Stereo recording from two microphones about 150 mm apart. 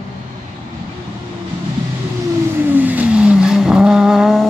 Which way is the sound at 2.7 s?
10° right (ahead or behind).